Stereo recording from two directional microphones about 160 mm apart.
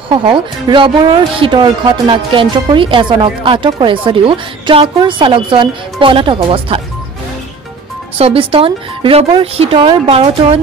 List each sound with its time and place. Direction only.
0.1 s speech: 30° right (ahead or behind)
8.2 s speech: 35° right (ahead or behind)